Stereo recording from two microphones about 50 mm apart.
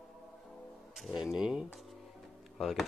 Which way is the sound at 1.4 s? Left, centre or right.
Centre.